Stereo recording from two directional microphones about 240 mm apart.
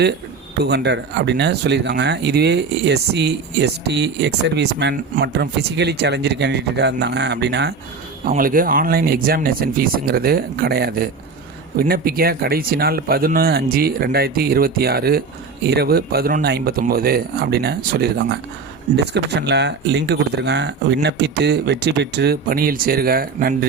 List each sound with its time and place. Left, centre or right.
0.6 s speech: right